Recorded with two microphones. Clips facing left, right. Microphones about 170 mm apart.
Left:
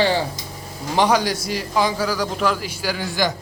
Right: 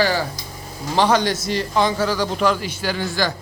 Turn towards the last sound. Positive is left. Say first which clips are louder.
# even
turn(degrees=10)  # may be behind; listen again after turning